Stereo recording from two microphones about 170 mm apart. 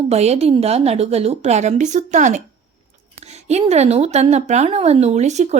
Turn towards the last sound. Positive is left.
turn(degrees=-40)  # may be behind; listen again after turning